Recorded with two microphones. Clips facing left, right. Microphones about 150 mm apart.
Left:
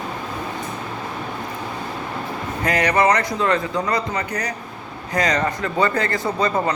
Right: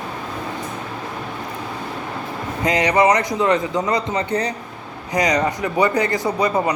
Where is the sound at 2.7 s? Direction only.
20° right (ahead or behind).